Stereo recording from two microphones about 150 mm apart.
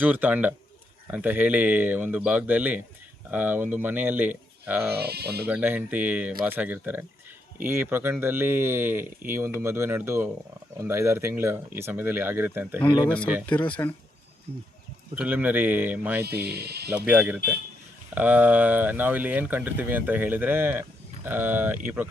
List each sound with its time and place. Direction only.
0.0 s speech: 10° right (ahead or behind)
4.9 s speech: 90° right
5.5 s speech: 10° right (ahead or behind)
13.4 s speech: 10° left (ahead or behind)
15.1 s speech: 10° right (ahead or behind)
16.2 s speech: 90° right
16.9 s speech: 10° right (ahead or behind)